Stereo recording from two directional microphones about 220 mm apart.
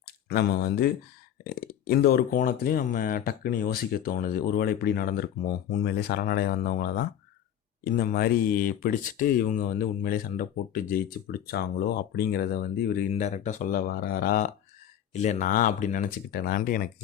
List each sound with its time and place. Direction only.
0.3 s speech: 45° left (ahead or behind)